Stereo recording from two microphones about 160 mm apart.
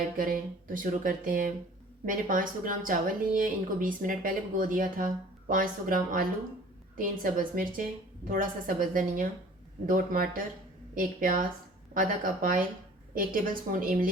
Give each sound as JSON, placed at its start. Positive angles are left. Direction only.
{"t": 0.2, "sound": "a woman's voice", "side_deg": -60}